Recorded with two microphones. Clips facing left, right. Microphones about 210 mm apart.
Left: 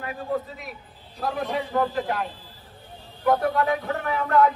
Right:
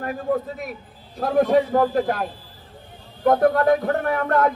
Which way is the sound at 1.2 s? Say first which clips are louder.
Right 10 dB; 50° right (ahead or behind).